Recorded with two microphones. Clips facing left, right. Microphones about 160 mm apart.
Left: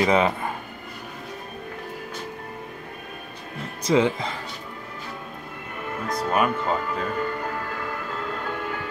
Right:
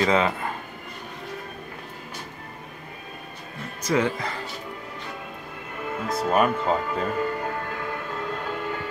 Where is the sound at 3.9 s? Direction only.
20° left (ahead or behind).